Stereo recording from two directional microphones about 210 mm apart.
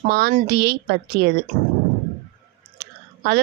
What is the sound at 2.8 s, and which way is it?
Chewing, 50° right (ahead or behind).